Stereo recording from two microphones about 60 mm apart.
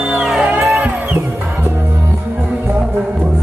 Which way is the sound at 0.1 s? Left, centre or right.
Centre.